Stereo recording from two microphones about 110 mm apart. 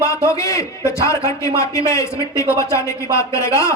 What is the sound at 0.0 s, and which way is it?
A man's voice, 25° left (ahead or behind).